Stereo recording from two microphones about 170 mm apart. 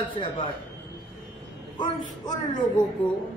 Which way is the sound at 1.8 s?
25° left (ahead or behind).